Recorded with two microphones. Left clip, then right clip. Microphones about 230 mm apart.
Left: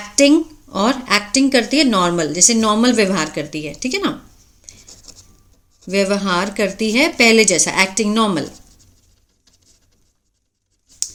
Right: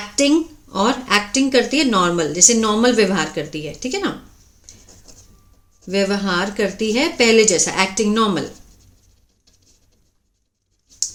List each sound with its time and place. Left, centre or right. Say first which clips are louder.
0.2 s speech: left 4 dB; left
4.6 s scratch: left 4 dB; left
5.8 s speech: left 2 dB; left